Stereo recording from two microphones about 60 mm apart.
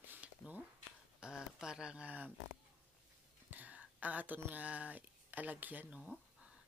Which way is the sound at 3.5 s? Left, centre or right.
Right.